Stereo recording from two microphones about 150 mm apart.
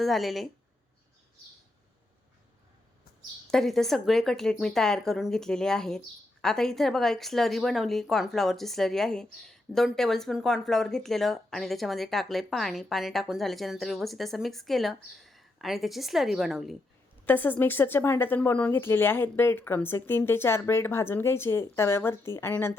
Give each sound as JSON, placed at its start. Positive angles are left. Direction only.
{"t": 0.0, "sound": "speech", "side_deg": 0}
{"t": 3.4, "sound": "speech", "side_deg": 5}
{"t": 17.2, "sound": "speech", "side_deg": 10}